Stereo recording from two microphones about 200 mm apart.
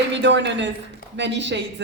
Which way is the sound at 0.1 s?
60° right (ahead or behind).